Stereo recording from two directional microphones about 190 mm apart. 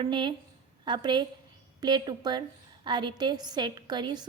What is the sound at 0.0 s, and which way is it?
A woman's voice, 25° right (ahead or behind).